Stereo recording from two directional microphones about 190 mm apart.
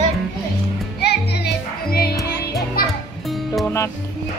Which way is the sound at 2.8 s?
50° left (ahead or behind).